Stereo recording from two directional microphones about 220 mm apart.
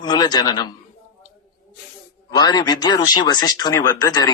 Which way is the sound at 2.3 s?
20° left (ahead or behind).